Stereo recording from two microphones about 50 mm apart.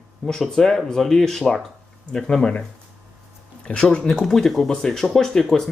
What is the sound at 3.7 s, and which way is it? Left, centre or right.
Speech, left.